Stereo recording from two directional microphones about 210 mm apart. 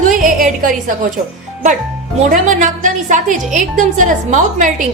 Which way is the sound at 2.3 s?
35° right (ahead or behind).